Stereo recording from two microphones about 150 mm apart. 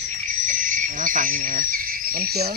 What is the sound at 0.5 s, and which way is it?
Speech, 60° right (ahead or behind).